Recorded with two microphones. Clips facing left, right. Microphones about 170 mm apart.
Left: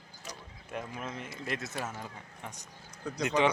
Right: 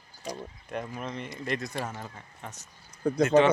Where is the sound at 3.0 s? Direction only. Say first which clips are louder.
Right 11 dB; 55° right (ahead or behind).